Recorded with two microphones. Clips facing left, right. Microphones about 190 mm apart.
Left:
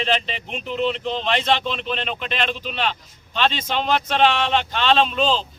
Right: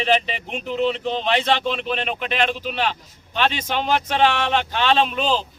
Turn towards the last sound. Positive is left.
turn(degrees=-10)  # may be behind; listen again after turning